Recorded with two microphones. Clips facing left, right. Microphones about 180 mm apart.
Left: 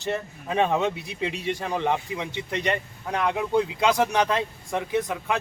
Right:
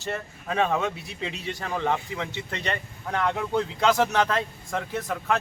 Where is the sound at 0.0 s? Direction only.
15° left (ahead or behind).